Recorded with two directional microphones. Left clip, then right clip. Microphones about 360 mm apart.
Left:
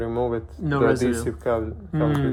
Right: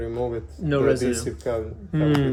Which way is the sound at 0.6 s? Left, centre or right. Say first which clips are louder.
Even; centre.